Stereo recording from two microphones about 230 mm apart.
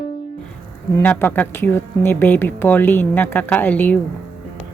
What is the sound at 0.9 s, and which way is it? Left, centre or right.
A woman's voice, centre.